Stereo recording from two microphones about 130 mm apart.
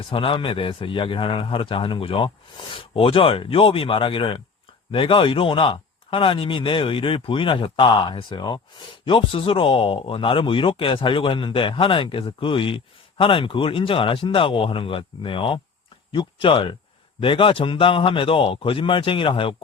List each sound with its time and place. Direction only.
0.1 s a man's voice: 40° left (ahead or behind)